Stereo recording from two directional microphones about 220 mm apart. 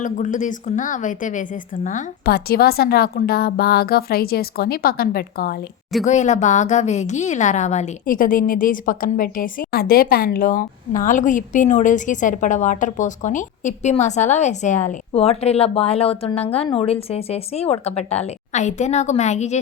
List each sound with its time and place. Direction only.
0.0 s a woman's voice: 35° left (ahead or behind)